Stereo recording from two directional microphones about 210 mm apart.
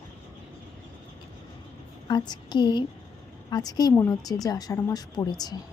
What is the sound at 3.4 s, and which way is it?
A woman's voice, 20° left (ahead or behind).